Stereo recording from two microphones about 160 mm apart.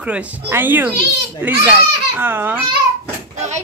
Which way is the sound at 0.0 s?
10° right (ahead or behind).